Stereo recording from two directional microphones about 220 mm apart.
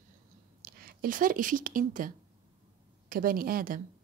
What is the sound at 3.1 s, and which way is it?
Speech, 40° right (ahead or behind).